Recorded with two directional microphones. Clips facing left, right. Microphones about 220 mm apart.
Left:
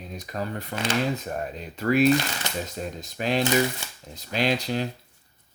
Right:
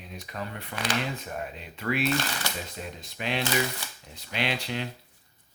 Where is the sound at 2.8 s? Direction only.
40° left (ahead or behind).